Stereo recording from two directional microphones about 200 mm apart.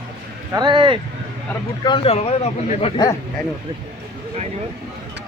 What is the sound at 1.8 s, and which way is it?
A man's voice, 25° left (ahead or behind).